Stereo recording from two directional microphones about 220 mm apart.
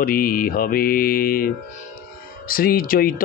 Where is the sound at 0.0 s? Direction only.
40° left (ahead or behind).